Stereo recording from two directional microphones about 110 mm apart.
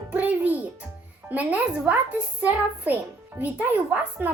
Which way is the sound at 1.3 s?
15° right (ahead or behind).